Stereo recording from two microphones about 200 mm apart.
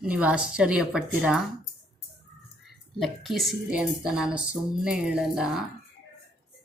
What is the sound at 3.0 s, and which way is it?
Speech, centre (ahead or behind).